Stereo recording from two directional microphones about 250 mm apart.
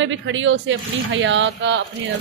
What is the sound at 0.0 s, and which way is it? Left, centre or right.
A man's voice, right.